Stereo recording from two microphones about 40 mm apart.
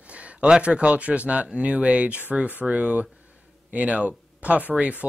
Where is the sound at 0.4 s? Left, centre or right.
Right.